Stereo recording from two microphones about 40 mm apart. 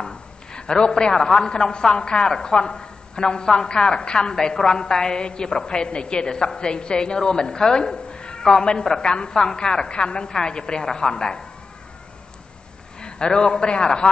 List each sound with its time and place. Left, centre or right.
0.0 s a man's voice: left
13.0 s a man's voice: centre